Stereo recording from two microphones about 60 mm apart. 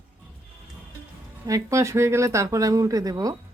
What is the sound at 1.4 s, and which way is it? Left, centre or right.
Speech, right.